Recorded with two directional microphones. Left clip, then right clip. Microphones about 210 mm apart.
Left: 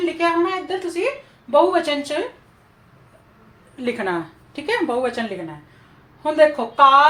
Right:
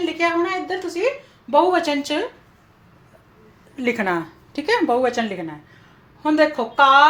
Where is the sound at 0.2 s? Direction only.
45° right (ahead or behind).